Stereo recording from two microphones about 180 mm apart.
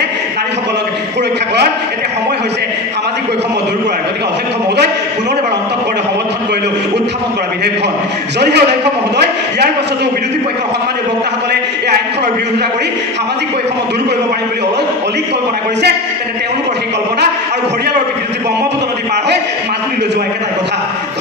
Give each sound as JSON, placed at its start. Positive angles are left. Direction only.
{"t": 8.4, "sound": "a man's voice", "side_deg": -70}